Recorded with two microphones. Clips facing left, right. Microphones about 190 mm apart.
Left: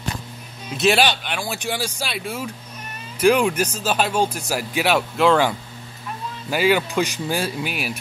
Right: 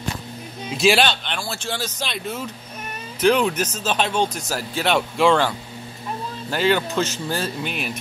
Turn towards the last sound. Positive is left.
turn(degrees=5)  # may be behind; listen again after turning